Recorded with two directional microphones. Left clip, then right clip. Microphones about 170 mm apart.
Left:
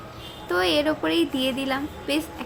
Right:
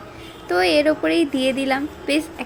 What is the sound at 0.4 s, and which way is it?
A woman's voice, 15° right (ahead or behind).